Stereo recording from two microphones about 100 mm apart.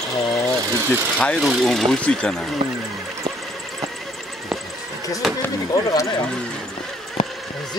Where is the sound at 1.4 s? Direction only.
Centre (ahead or behind).